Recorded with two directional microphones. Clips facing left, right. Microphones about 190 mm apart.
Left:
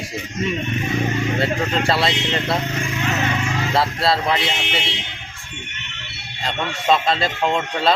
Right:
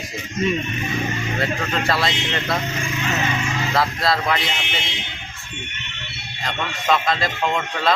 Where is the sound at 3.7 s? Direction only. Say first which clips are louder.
Left 1 dB; 30° left (ahead or behind).